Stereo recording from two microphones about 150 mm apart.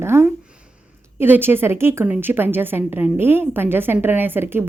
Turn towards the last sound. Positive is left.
turn(degrees=-15)  # may be behind; listen again after turning